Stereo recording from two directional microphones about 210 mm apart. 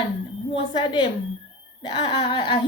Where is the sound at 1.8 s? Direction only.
20° left (ahead or behind).